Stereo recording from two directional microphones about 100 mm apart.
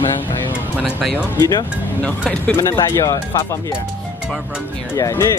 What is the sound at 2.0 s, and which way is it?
Speech, 10° left (ahead or behind).